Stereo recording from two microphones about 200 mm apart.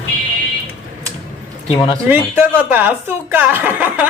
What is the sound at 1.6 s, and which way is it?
Speech, 25° left (ahead or behind).